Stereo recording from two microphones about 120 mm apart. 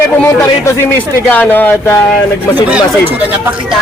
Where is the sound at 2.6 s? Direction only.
10° right (ahead or behind).